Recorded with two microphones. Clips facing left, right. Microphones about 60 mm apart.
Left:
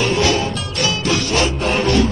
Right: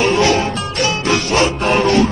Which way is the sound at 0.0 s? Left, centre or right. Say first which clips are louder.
Right 3 dB; right.